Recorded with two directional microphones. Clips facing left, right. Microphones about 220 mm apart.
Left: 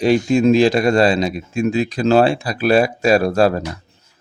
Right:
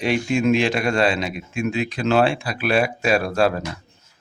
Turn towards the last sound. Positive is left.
turn(degrees=40)  # may be behind; listen again after turning